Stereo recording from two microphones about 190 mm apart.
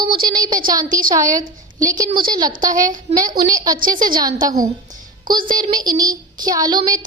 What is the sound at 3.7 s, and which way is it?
Speech, 45° right (ahead or behind).